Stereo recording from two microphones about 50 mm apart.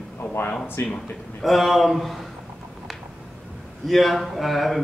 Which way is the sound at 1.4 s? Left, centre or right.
Centre.